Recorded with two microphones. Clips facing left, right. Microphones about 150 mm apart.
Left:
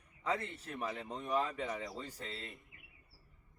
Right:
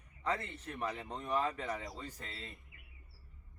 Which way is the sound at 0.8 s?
10° left (ahead or behind).